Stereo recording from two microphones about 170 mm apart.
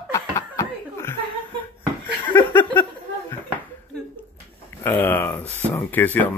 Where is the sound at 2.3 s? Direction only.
15° left (ahead or behind).